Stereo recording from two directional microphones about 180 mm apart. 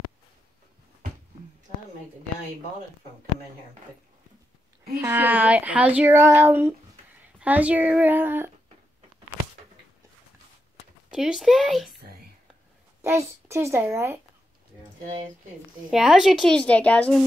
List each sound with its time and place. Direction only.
4.9 s speech: 15° right (ahead or behind)
11.1 s a woman's voice: 5° right (ahead or behind)
13.5 s speech: 15° right (ahead or behind)
15.9 s a woman's voice: centre (ahead or behind)